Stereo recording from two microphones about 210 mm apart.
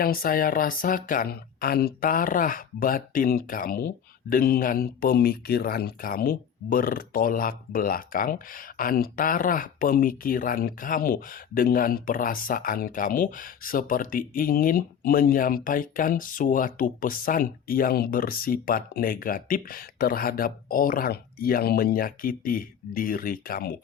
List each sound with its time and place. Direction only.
0.0 s speech: 45° left (ahead or behind)